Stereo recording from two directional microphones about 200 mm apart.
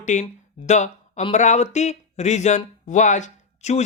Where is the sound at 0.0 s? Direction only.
35° left (ahead or behind).